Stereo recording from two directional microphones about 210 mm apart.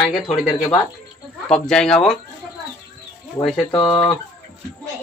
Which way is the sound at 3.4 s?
20° left (ahead or behind).